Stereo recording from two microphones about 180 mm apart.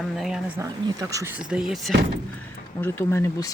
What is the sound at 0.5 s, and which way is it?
Speech, 20° right (ahead or behind).